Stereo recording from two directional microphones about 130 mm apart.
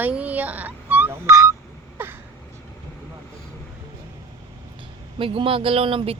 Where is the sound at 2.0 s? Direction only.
15° right (ahead or behind).